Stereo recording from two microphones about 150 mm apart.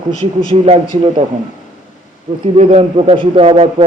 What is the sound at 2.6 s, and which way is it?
A man's voice, 40° right (ahead or behind).